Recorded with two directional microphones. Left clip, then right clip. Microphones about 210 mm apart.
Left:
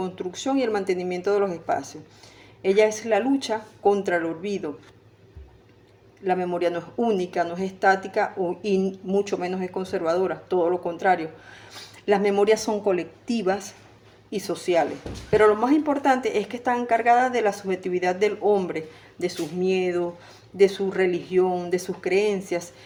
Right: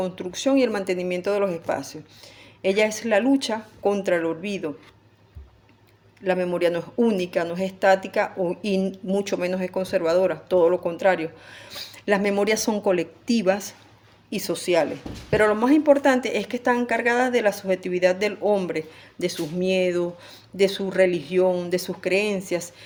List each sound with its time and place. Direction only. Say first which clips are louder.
0.0 s speech: right 3 dB; 40° right (ahead or behind)
6.2 s speech: right 2 dB; 45° right (ahead or behind)